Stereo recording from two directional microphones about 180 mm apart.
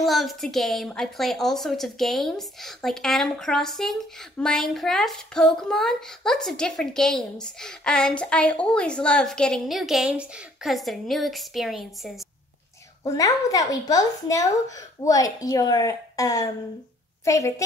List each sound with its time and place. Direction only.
0.0 s a child's voice: centre (ahead or behind)
13.0 s a woman's voice: 20° left (ahead or behind)